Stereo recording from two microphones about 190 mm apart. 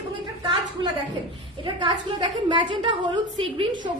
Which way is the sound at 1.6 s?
25° right (ahead or behind).